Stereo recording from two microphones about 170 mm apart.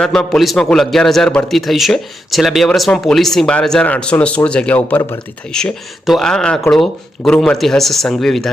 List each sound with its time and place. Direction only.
0.0 s a man's voice: 5° left (ahead or behind)